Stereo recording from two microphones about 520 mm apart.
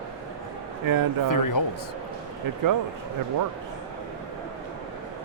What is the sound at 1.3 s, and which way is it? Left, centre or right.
Speech, left.